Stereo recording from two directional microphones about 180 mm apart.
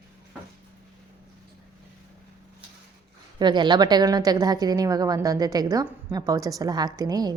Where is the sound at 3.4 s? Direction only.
25° right (ahead or behind).